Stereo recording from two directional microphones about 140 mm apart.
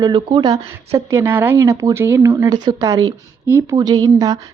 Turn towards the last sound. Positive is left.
turn(degrees=-25)  # may be behind; listen again after turning